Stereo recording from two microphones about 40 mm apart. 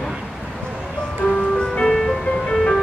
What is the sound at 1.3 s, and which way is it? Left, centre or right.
Music, left.